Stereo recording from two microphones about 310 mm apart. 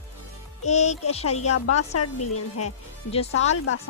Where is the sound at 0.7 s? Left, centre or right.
Left.